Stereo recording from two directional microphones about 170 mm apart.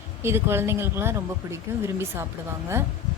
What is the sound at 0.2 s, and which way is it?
A woman's voice, 15° right (ahead or behind).